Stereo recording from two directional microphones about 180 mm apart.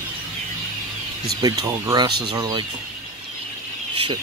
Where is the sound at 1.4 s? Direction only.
20° right (ahead or behind).